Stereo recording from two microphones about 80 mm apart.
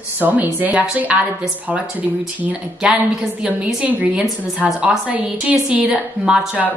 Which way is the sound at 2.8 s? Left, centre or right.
Centre.